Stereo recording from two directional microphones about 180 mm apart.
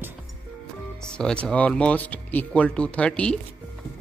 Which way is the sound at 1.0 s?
5° left (ahead or behind).